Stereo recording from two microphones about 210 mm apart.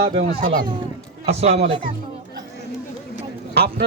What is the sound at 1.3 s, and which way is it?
Speech, 30° right (ahead or behind).